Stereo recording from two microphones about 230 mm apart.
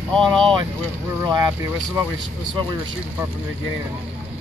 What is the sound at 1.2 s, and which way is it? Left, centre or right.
Speech, centre.